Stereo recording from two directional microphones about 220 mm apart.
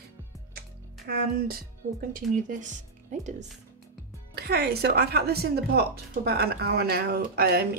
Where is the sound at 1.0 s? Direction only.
45° right (ahead or behind).